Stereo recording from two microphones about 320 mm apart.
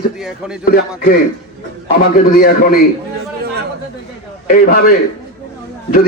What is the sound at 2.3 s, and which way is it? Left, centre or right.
Speech, left.